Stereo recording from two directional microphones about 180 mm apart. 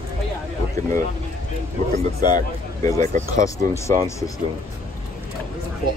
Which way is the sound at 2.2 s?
20° left (ahead or behind).